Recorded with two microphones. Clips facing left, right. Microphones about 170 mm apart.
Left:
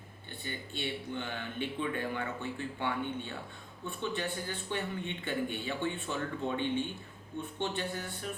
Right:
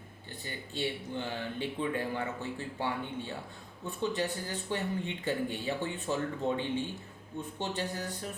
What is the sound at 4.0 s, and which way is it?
Speech, 40° right (ahead or behind).